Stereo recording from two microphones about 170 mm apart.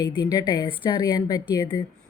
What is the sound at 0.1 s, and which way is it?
Speech, 25° left (ahead or behind).